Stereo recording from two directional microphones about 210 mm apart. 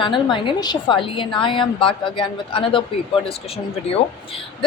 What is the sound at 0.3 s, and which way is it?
Speech, 20° left (ahead or behind).